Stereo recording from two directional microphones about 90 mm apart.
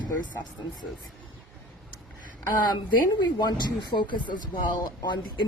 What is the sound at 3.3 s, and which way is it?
Speech, 50° left (ahead or behind).